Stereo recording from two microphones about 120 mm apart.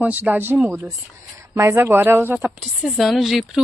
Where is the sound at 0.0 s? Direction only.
15° right (ahead or behind).